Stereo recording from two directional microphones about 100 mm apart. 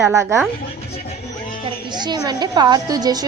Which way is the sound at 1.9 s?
45° right (ahead or behind).